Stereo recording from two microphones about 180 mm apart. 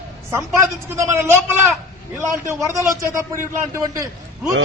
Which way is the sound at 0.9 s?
15° right (ahead or behind).